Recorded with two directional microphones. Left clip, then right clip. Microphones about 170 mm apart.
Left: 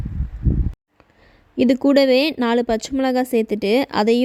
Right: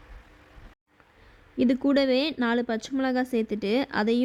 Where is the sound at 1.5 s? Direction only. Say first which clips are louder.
Left 8 dB; 35° left (ahead or behind).